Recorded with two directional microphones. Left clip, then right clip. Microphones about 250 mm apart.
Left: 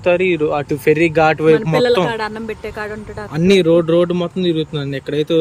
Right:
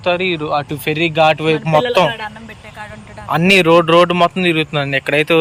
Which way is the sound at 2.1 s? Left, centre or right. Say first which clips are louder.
Left 5 dB; left.